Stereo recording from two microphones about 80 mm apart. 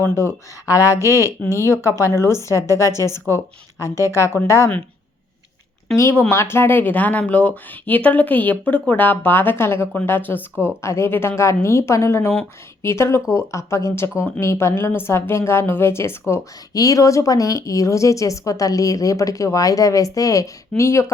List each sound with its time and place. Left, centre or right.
0.0 s a woman's voice: left
6.0 s speech: left
10.8 s a woman's voice: left
16.7 s a woman's voice: left